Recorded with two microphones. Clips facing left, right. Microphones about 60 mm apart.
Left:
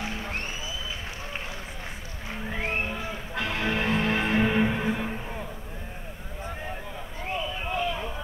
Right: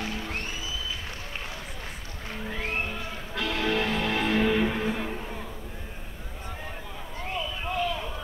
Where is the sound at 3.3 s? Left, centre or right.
Left.